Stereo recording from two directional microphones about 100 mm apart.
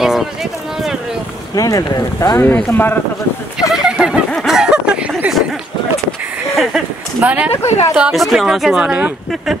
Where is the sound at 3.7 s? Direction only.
5° right (ahead or behind).